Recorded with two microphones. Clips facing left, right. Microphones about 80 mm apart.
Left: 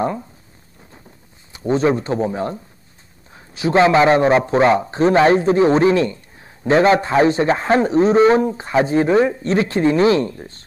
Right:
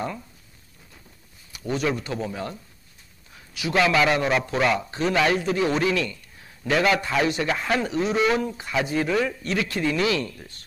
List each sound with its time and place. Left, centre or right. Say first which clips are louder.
0.0 s a man's voice: left 9 dB; left
1.5 s a man's voice: left 9 dB; left